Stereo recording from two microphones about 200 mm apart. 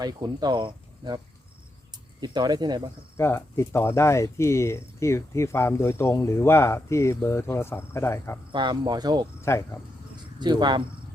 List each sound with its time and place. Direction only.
0.0 s speech: 20° right (ahead or behind)
2.2 s speech: 20° right (ahead or behind)
3.2 s speech: 10° left (ahead or behind)
8.5 s speech: 25° right (ahead or behind)
9.4 s speech: 15° left (ahead or behind)
10.4 s speech: 20° right (ahead or behind)